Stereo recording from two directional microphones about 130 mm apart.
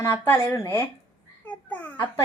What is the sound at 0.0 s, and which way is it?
Speech, 20° left (ahead or behind).